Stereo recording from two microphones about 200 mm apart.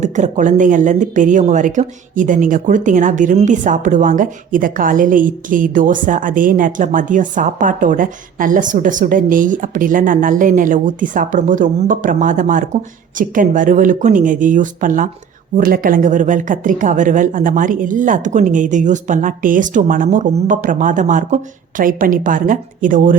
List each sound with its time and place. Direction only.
0.0 s speech: 40° right (ahead or behind)